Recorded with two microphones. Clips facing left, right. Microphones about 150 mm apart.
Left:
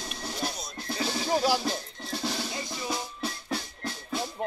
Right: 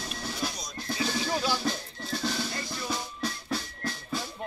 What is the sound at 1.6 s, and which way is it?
Music, 10° left (ahead or behind).